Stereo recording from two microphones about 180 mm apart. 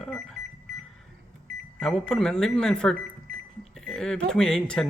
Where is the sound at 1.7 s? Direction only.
5° left (ahead or behind).